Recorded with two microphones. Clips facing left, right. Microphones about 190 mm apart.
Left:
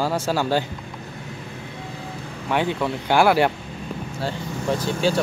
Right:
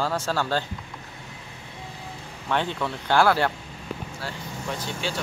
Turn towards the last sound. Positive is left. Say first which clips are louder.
# left 10 dB
turn(degrees=40)  # may be behind; listen again after turning